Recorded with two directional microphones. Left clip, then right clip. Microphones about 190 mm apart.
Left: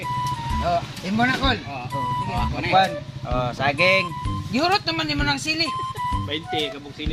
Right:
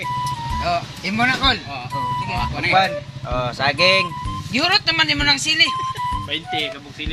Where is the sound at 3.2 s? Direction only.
20° right (ahead or behind).